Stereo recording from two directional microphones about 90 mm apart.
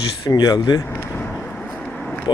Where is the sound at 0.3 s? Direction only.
45° left (ahead or behind).